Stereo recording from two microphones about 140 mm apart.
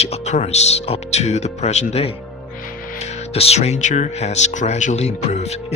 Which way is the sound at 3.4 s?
45° left (ahead or behind).